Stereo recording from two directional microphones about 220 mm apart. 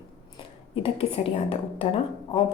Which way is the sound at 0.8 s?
25° left (ahead or behind).